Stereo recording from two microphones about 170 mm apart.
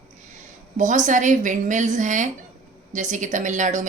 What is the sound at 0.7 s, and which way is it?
Speech, 45° right (ahead or behind).